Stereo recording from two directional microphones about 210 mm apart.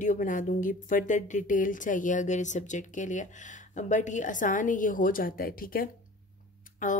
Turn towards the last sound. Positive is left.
turn(degrees=35)  # may be behind; listen again after turning